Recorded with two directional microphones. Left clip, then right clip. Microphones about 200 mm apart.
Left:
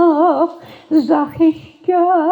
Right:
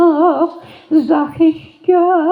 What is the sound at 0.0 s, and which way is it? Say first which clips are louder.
Female singing: right 1 dB; 25° left (ahead or behind).